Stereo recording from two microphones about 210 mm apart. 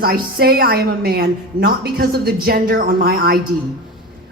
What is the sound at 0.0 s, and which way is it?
A woman's voice, 45° right (ahead or behind).